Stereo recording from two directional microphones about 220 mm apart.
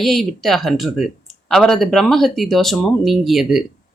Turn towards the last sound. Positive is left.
turn(degrees=0)  # may be behind; listen again after turning